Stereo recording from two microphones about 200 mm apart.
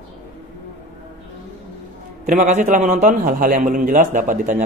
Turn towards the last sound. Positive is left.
turn(degrees=-40)  # may be behind; listen again after turning